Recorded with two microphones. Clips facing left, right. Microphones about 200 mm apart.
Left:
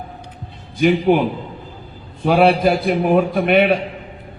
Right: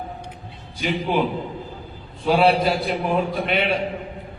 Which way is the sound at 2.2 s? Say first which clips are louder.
Left 4 dB; 55° left (ahead or behind).